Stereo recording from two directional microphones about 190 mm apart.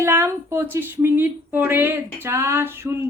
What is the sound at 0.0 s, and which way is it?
Speech, 15° right (ahead or behind).